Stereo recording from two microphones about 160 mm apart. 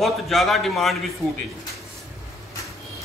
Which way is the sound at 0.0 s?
Centre (ahead or behind).